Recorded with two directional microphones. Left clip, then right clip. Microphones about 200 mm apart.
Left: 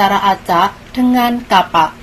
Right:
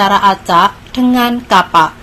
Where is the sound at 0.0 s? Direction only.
30° right (ahead or behind).